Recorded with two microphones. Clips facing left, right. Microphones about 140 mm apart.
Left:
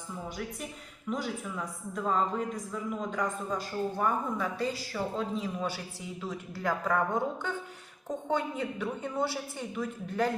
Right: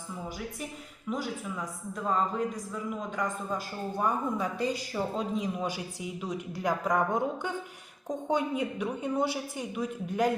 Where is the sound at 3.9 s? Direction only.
15° right (ahead or behind).